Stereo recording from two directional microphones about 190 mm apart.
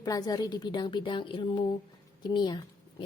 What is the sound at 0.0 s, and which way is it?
A woman's voice, 20° left (ahead or behind).